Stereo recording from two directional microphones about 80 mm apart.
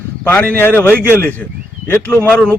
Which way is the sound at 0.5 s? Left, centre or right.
Left.